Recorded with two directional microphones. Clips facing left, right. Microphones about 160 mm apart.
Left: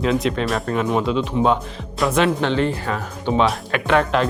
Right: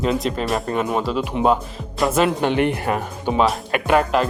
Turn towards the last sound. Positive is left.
turn(degrees=-5)  # may be behind; listen again after turning